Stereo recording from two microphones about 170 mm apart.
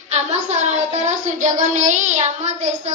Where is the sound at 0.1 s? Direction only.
40° right (ahead or behind).